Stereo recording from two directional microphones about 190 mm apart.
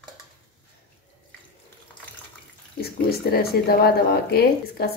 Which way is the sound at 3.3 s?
55° left (ahead or behind).